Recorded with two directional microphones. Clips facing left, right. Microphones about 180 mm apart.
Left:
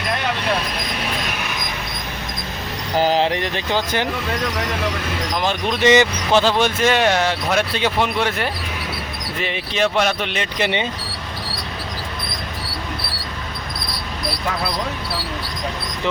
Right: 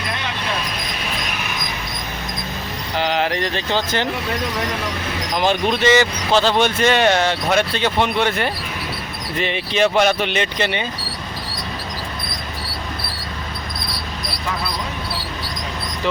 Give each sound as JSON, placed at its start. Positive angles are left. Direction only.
{"t": 3.0, "sound": "a sound", "side_deg": 35}
{"t": 3.2, "sound": "speech", "side_deg": 15}
{"t": 5.8, "sound": "speech", "side_deg": 15}
{"t": 6.6, "sound": "speech", "side_deg": 5}
{"t": 10.6, "sound": "speech", "side_deg": 20}